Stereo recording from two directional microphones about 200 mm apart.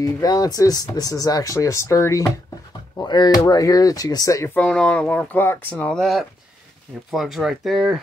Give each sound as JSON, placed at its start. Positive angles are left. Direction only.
{"t": 0.0, "sound": "speech", "side_deg": 20}
{"t": 4.6, "sound": "speech", "side_deg": 5}